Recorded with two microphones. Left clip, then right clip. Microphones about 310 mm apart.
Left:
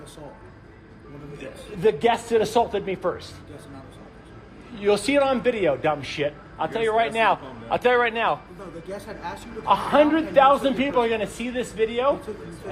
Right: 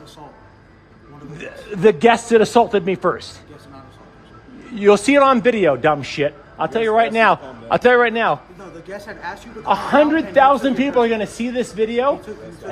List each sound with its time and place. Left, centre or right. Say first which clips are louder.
1.4 s a man's voice: right 8 dB; right
4.7 s a man's voice: right 8 dB; right